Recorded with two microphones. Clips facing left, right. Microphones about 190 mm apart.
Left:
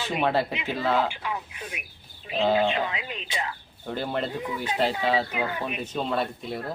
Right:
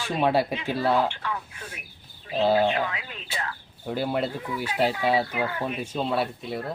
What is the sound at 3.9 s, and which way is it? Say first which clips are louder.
Speech: right 2 dB; 5° right (ahead or behind).